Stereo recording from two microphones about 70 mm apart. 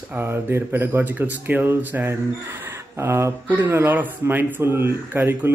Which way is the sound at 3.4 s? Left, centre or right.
Right.